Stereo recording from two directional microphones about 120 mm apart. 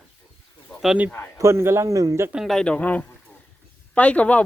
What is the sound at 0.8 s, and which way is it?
Speech, 5° right (ahead or behind).